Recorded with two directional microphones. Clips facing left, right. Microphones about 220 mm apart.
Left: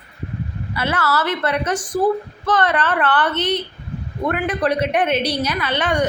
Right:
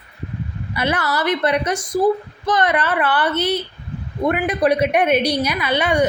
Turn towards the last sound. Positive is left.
turn(degrees=-10)  # may be behind; listen again after turning